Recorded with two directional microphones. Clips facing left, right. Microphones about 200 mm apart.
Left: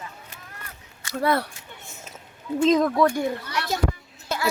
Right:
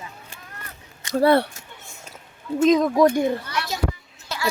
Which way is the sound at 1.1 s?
30° right (ahead or behind).